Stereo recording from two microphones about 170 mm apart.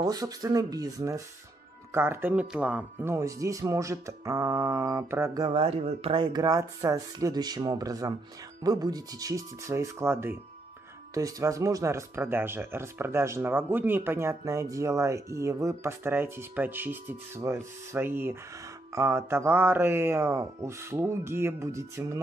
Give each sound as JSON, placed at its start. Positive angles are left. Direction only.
{"t": 0.0, "sound": "speech", "side_deg": -20}